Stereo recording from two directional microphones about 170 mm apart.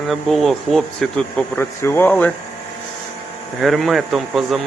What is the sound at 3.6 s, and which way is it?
Speech, centre (ahead or behind).